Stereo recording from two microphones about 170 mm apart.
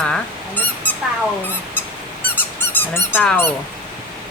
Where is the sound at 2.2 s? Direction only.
10° left (ahead or behind).